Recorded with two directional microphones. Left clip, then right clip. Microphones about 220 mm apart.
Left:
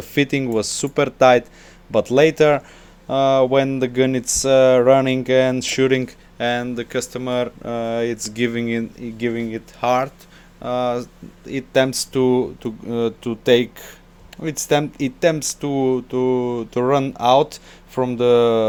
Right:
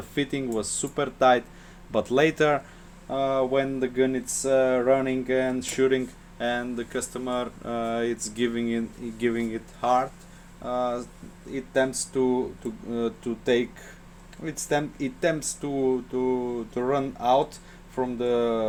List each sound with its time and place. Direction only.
0.1 s speech: 35° left (ahead or behind)
3.1 s speech: 35° left (ahead or behind)
7.6 s speech: 25° left (ahead or behind)
9.8 s speech: 40° left (ahead or behind)